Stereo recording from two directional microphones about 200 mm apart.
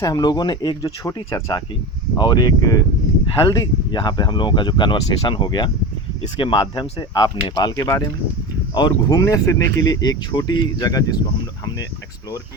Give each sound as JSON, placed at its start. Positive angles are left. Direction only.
{"t": 0.0, "sound": "speech", "side_deg": 20}